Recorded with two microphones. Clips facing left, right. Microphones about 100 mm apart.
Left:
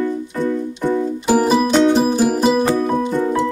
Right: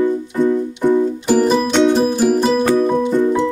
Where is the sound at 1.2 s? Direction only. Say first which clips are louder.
Left 3 dB; 5° left (ahead or behind).